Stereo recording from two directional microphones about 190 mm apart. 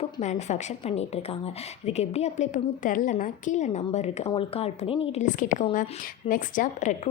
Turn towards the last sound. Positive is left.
turn(degrees=40)  # may be behind; listen again after turning